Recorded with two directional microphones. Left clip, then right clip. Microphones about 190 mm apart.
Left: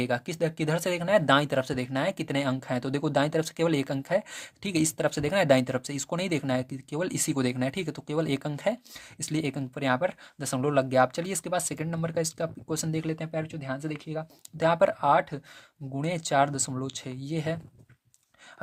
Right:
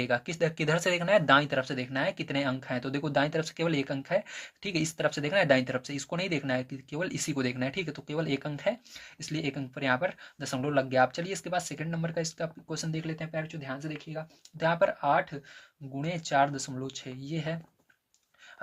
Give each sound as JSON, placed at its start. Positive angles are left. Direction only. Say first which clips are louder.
{"t": 0.0, "sound": "speech", "louder": "even", "side_deg": 35}